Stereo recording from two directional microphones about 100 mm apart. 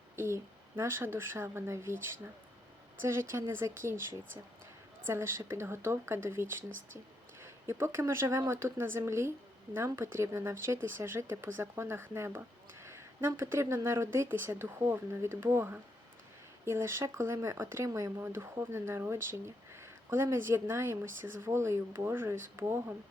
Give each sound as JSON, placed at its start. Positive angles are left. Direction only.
{"t": 0.8, "sound": "speech", "side_deg": -25}
{"t": 3.0, "sound": "speech", "side_deg": -25}
{"t": 5.0, "sound": "speech", "side_deg": -25}